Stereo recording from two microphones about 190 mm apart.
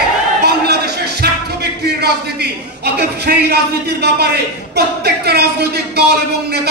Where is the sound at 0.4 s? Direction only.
60° right (ahead or behind).